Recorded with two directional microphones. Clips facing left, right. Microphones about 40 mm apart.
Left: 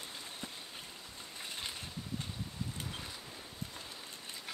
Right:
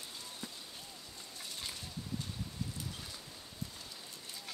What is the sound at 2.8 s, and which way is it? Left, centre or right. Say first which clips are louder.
Boat: left 2 dB; left.